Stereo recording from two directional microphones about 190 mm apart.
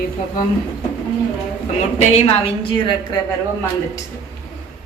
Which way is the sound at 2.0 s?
30° left (ahead or behind).